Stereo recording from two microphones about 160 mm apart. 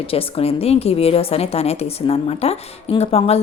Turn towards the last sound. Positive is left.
turn(degrees=40)  # may be behind; listen again after turning